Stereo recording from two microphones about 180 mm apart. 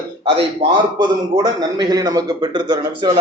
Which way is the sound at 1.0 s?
25° right (ahead or behind).